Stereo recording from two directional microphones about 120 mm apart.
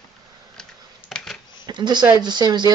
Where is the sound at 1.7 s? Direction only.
35° right (ahead or behind).